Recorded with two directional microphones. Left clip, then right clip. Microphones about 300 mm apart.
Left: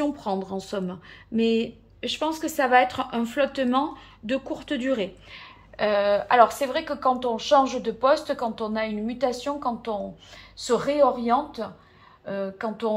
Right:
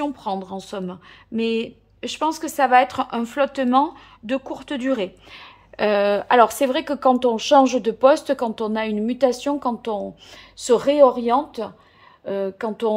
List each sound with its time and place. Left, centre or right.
0.0 s a woman's voice: centre; by 12.9 s right